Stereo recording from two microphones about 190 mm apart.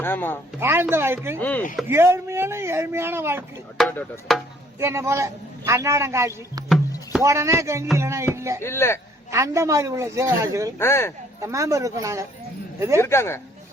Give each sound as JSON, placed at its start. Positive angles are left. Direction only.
{"t": 0.0, "sound": "speech", "side_deg": 10}
{"t": 0.6, "sound": "a man's voice", "side_deg": -10}
{"t": 1.4, "sound": "speech", "side_deg": 10}
{"t": 1.9, "sound": "a man's voice", "side_deg": -15}
{"t": 3.8, "sound": "speech", "side_deg": 5}
{"t": 4.8, "sound": "a man's voice", "side_deg": -15}
{"t": 8.6, "sound": "speech", "side_deg": 15}
{"t": 9.3, "sound": "a man's voice", "side_deg": -15}
{"t": 10.8, "sound": "speech", "side_deg": 15}
{"t": 11.3, "sound": "a man's voice", "side_deg": -15}
{"t": 13.0, "sound": "speech", "side_deg": 15}